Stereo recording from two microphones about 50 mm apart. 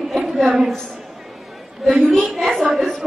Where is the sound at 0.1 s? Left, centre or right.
Centre.